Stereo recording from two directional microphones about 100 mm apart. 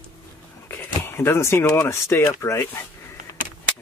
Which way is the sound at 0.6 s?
25° left (ahead or behind).